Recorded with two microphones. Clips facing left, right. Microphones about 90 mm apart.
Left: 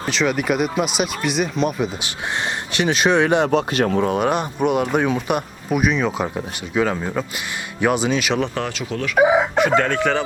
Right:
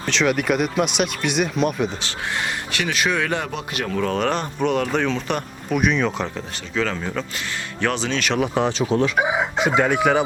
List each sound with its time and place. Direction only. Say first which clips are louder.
0.1 s speech: even; centre (ahead or behind)
2.7 s speech: left 6 dB; 25° left (ahead or behind)
3.5 s speech: left 8 dB; 35° left (ahead or behind)
4.0 s speech: left 3 dB; 15° left (ahead or behind)
8.5 s speech: right 5 dB; 25° right (ahead or behind)
9.6 s speech: left 2 dB; 15° right (ahead or behind)